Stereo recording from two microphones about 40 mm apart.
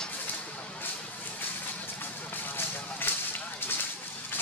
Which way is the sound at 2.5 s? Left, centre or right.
Left.